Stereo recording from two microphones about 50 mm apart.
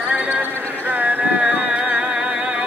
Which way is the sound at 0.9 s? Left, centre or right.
Right.